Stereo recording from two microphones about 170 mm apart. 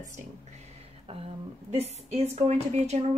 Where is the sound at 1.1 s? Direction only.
35° right (ahead or behind).